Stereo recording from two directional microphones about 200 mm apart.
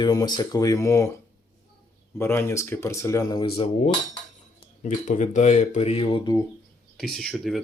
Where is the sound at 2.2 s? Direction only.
10° left (ahead or behind).